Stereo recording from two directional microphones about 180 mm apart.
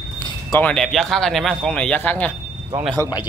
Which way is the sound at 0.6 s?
5° left (ahead or behind).